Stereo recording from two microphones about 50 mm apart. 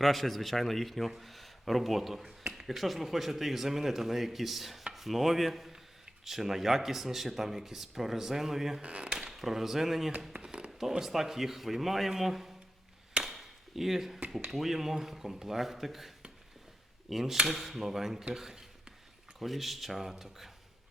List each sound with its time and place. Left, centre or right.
0.0 s a man's voice: centre
8.8 s speech: right
9.1 s speech: centre
10.3 s a sound: centre
10.7 s a sound: centre
11.0 s a man's voice: centre
13.2 s chop: centre
14.5 s a man's voice: centre
18.3 s a sound: centre
19.4 s a man's voice: centre